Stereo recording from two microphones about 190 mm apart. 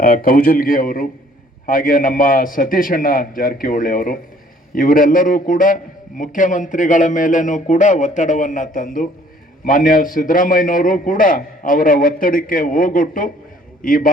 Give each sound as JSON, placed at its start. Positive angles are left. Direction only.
{"t": 0.0, "sound": "a man's voice", "side_deg": 50}